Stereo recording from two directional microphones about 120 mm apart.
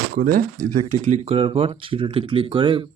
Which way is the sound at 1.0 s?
65° right (ahead or behind).